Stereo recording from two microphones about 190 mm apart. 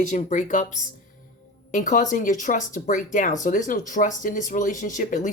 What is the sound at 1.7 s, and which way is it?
Speech, 45° left (ahead or behind).